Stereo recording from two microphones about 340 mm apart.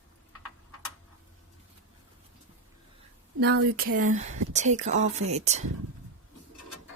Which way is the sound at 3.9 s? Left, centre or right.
Right.